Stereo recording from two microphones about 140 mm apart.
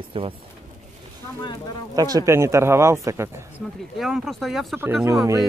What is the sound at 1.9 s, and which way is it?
Speech, 25° right (ahead or behind).